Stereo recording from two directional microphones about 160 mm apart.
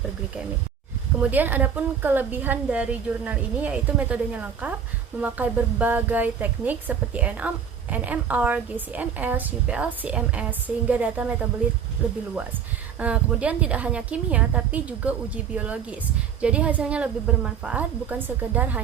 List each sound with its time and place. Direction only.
1.2 s a woman's voice: 10° right (ahead or behind)